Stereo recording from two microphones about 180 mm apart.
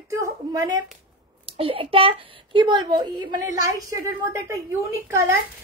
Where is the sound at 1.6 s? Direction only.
30° right (ahead or behind).